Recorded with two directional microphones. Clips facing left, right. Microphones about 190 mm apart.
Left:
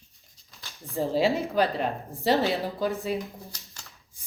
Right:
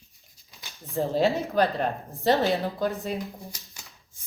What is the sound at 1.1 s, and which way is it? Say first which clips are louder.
A woman's voice: even; 10° left (ahead or behind).